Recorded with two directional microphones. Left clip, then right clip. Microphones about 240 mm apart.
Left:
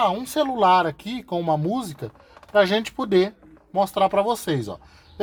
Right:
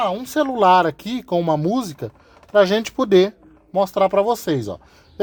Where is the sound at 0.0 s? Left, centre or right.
Right.